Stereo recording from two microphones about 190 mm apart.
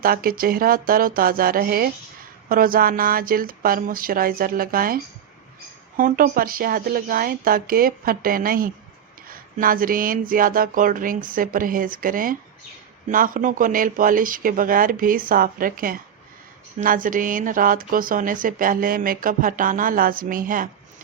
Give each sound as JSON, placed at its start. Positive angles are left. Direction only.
{"t": 0.0, "sound": "speech", "side_deg": -50}
{"t": 6.0, "sound": "speech", "side_deg": -45}